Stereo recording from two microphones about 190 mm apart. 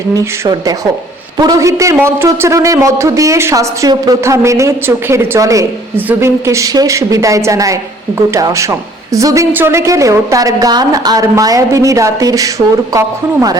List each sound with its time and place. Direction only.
0.1 s a man's voice: 20° right (ahead or behind)